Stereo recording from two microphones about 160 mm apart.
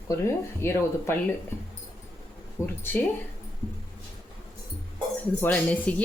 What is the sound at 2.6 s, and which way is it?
Speech, 15° left (ahead or behind).